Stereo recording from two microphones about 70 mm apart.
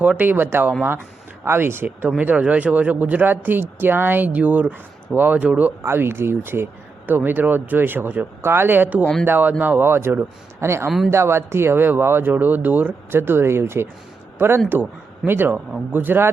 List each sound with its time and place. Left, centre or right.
0.2 s speech: right
5.8 s speech: right
10.8 s speech: centre
11.1 s a man's voice: right